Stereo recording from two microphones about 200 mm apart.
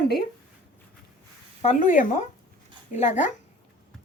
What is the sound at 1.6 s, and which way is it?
Speech, 40° left (ahead or behind).